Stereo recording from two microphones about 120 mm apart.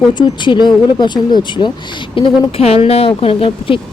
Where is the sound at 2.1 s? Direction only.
50° left (ahead or behind).